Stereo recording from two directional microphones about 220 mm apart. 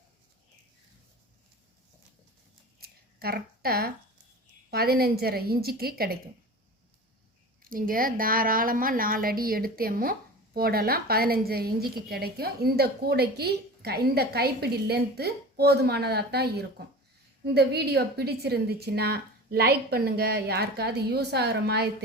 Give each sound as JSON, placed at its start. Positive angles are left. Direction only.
{"t": 2.8, "sound": "a sound", "side_deg": -45}
{"t": 4.7, "sound": "a woman's voice", "side_deg": -45}
{"t": 7.6, "sound": "a woman's voice", "side_deg": -40}